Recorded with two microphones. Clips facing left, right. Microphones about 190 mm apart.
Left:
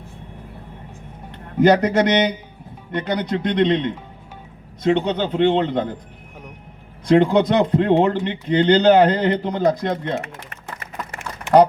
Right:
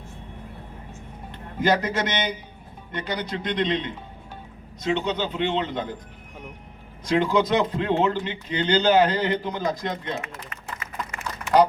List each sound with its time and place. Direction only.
1.6 s speech: 60° left (ahead or behind)
7.1 s speech: 55° left (ahead or behind)